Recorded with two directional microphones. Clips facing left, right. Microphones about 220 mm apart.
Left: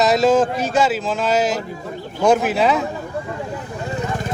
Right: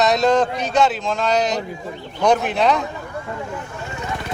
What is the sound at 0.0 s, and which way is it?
Speech, 5° left (ahead or behind).